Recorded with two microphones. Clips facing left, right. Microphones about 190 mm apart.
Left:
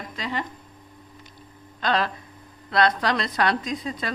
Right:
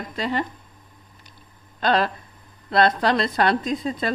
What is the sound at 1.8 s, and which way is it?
A woman's voice, 35° right (ahead or behind).